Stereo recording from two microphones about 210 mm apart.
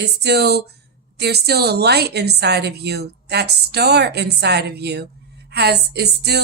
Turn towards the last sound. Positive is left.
turn(degrees=-50)  # may be behind; listen again after turning